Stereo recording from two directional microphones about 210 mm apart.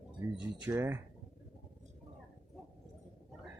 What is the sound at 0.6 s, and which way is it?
Speech, 15° right (ahead or behind).